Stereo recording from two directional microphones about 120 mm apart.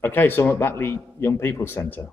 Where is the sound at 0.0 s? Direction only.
15° left (ahead or behind).